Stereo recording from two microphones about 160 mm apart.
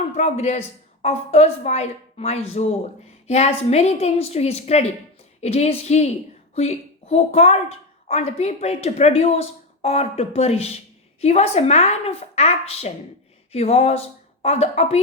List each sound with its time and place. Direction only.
0.2 s a woman's voice: 45° left (ahead or behind)